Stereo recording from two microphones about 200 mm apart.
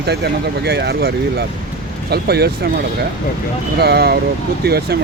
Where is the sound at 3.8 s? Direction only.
55° right (ahead or behind).